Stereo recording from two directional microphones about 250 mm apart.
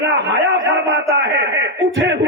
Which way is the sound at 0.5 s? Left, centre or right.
Right.